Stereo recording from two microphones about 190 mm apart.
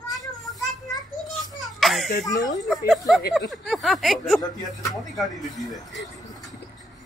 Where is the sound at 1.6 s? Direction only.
Centre (ahead or behind).